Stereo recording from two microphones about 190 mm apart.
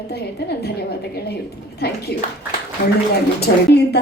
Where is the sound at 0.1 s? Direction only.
60° left (ahead or behind).